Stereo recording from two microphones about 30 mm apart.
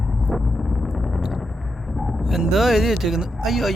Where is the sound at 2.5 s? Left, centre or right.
Centre.